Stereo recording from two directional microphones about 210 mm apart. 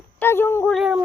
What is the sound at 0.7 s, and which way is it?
Speech, centre (ahead or behind).